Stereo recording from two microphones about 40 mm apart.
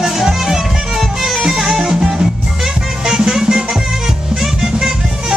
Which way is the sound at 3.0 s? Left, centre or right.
Centre.